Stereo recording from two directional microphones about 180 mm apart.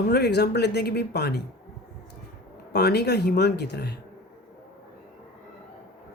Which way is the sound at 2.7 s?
65° left (ahead or behind).